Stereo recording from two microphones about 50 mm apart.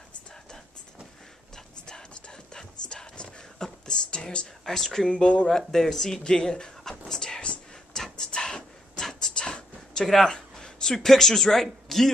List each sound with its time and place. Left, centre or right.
1.9 s whispering: centre
4.6 s speech: centre
5.1 s speech: left
5.7 s speech: centre
6.2 s a sound: centre